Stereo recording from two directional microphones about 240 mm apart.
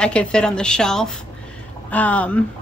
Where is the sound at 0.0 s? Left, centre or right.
Centre.